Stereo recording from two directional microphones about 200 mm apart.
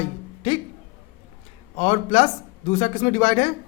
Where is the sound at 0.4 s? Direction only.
30° left (ahead or behind).